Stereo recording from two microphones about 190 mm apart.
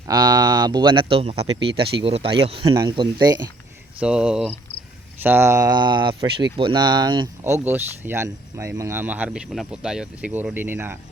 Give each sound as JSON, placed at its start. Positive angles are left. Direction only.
{"t": 0.1, "sound": "speech", "side_deg": -20}
{"t": 4.0, "sound": "speech", "side_deg": -5}
{"t": 7.4, "sound": "speech", "side_deg": -10}